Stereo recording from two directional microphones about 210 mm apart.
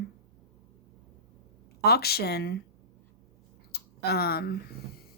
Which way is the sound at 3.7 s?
50° left (ahead or behind).